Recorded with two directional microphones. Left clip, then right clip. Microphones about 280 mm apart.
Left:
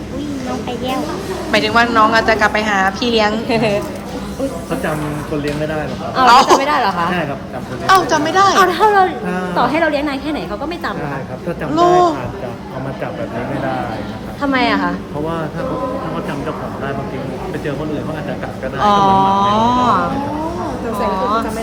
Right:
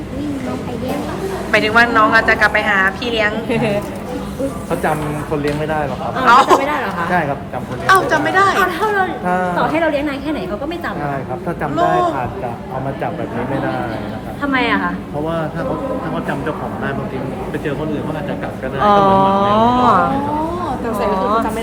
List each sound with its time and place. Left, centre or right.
1.5 s a woman's voice: centre
3.5 s a woman's voice: left
6.2 s a woman's voice: centre
6.6 s a woman's voice: left
7.9 s a woman's voice: centre
8.6 s a woman's voice: left
11.7 s a woman's voice: centre
14.4 s a woman's voice: centre
18.8 s speech: centre